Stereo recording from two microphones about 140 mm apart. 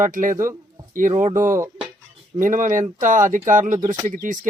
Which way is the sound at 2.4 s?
65° right (ahead or behind).